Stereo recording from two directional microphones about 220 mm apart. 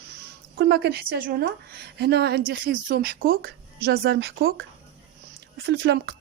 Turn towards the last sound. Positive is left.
turn(degrees=-50)  # may be behind; listen again after turning